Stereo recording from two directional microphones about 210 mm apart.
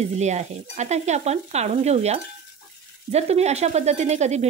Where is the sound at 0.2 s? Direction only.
35° right (ahead or behind).